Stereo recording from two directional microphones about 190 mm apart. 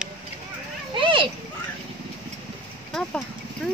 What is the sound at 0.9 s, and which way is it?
Children playing, 25° right (ahead or behind).